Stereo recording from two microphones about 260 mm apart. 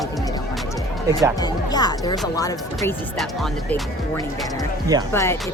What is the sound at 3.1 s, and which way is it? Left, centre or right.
Speech, centre.